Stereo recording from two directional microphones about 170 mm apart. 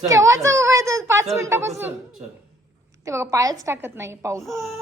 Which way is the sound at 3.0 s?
15° right (ahead or behind).